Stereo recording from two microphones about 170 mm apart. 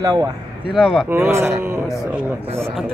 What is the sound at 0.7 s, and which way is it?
Speech, centre (ahead or behind).